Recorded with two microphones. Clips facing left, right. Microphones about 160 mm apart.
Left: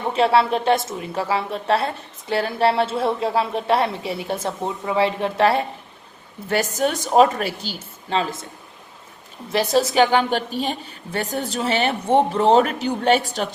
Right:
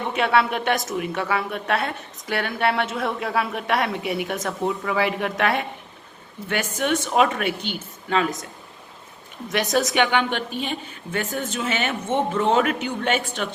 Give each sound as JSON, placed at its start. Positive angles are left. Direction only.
{"t": 0.1, "sound": "a woman's voice", "side_deg": 30}
{"t": 9.5, "sound": "a woman's voice", "side_deg": 30}